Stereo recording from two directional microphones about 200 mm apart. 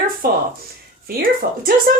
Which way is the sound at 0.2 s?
45° right (ahead or behind).